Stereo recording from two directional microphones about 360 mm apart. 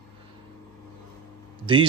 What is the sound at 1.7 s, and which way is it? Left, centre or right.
Speech, centre.